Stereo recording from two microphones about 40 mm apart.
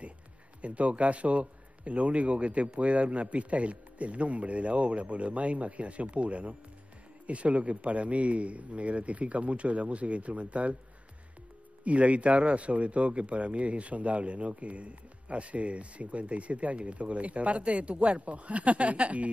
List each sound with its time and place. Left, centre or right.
0.6 s speech: right
11.8 s speech: right